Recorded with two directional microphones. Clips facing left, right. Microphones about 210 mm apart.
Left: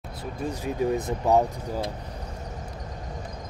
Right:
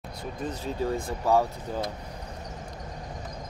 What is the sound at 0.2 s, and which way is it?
Speech, 10° left (ahead or behind).